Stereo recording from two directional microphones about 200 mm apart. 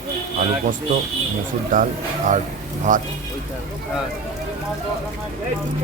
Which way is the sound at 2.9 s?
40° right (ahead or behind).